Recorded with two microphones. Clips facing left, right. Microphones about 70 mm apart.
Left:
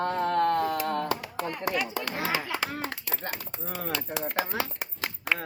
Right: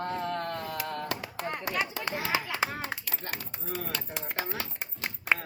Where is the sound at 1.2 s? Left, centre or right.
Right.